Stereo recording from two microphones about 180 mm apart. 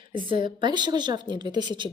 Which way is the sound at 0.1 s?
25° right (ahead or behind).